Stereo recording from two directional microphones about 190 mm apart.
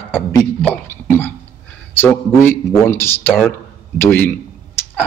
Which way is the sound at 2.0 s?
10° left (ahead or behind).